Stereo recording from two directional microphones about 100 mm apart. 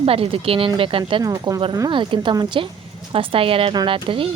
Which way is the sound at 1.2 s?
40° right (ahead or behind).